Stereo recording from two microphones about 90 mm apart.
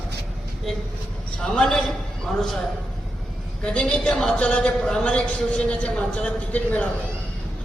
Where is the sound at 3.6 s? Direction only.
10° left (ahead or behind).